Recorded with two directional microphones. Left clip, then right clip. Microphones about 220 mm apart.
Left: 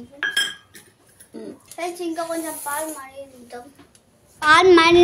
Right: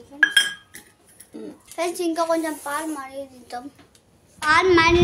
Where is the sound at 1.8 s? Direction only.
50° right (ahead or behind).